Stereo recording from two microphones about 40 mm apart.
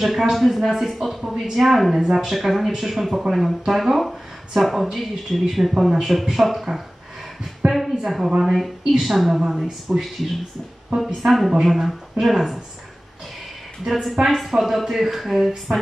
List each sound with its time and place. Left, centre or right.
0.0 s speech: centre
8.0 s speech: centre
13.8 s a woman's voice: centre